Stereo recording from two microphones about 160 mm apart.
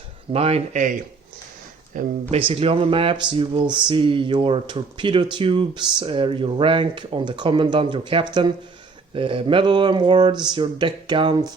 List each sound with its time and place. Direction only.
0.3 s speech: 40° right (ahead or behind)
1.9 s speech: 55° right (ahead or behind)
2.3 s speech: 35° right (ahead or behind)